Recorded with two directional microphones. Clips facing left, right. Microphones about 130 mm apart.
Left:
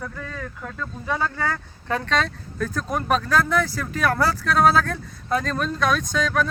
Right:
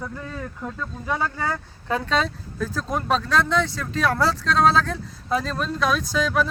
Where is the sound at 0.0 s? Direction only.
20° right (ahead or behind).